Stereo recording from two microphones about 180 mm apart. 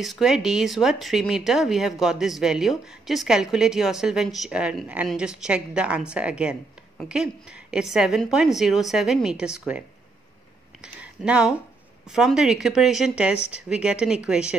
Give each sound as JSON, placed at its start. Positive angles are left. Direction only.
{"t": 0.0, "sound": "speech", "side_deg": 0}
{"t": 10.8, "sound": "a sound", "side_deg": -5}
{"t": 12.1, "sound": "speech", "side_deg": -5}